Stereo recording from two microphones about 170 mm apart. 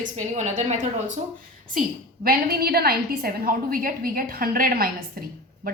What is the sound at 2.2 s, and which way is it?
A woman's voice, 65° right (ahead or behind).